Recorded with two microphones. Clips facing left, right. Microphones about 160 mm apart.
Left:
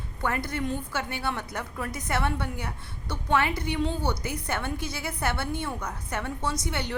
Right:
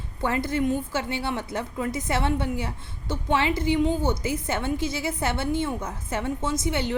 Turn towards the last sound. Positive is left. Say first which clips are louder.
# right 5 dB
turn(degrees=-20)  # may be behind; listen again after turning